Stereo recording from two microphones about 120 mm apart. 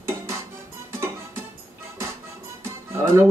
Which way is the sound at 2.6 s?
25° right (ahead or behind).